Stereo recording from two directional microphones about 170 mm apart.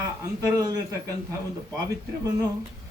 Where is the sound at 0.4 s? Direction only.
20° right (ahead or behind).